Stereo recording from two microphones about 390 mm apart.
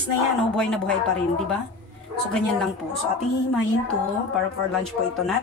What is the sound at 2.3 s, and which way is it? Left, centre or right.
Speech, centre.